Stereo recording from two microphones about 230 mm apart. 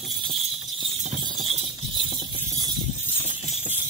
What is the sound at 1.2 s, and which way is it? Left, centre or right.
Clip-clop, right.